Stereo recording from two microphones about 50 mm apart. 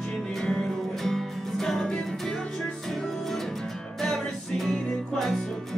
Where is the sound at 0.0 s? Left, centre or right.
Centre.